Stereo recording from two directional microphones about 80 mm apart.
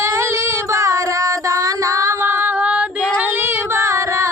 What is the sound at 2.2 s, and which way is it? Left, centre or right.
Female singing, right.